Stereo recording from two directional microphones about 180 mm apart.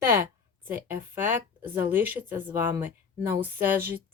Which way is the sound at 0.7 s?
10° right (ahead or behind).